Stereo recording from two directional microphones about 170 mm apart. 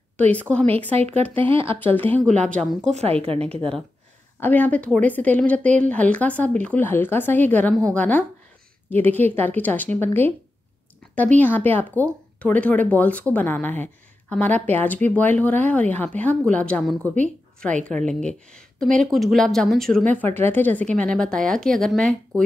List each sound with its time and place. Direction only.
0.2 s speech: 10° left (ahead or behind)
1.5 s a woman's voice: 35° right (ahead or behind)
2.0 s speech: 10° left (ahead or behind)
2.9 s a woman's voice: 35° right (ahead or behind)
4.4 s speech: 10° left (ahead or behind)
17.7 s a woman's voice: 45° right (ahead or behind)
18.0 s a woman's voice: 5° left (ahead or behind)